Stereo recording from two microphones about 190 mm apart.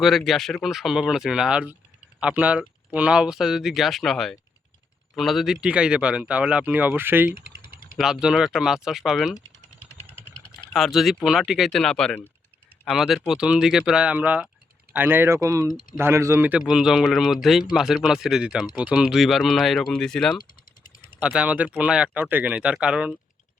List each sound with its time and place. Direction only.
0.0 s speech: centre (ahead or behind)
7.7 s typing: 45° left (ahead or behind)
7.9 s speech: centre (ahead or behind)
10.8 s speech: centre (ahead or behind)